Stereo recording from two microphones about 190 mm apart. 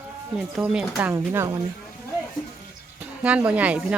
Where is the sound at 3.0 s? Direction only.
5° right (ahead or behind).